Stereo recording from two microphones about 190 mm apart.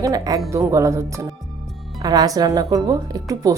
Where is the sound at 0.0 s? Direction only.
20° right (ahead or behind).